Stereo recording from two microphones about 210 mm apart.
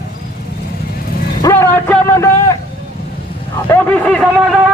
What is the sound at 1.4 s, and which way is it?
A man's voice, 10° left (ahead or behind).